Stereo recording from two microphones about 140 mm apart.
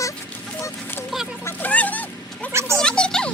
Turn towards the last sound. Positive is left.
turn(degrees=5)  # may be behind; listen again after turning